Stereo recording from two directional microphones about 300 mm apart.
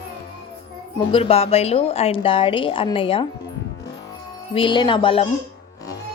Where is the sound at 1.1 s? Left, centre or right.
Centre.